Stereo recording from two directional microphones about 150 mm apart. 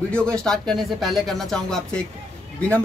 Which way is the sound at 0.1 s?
5° left (ahead or behind).